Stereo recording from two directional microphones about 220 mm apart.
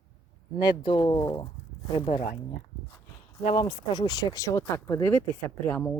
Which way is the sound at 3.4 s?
20° left (ahead or behind).